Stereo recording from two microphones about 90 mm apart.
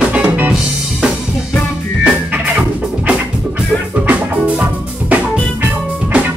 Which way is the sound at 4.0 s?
15° right (ahead or behind).